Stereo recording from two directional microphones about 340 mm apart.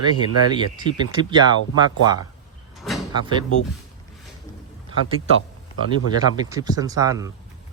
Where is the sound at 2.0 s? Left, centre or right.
Left.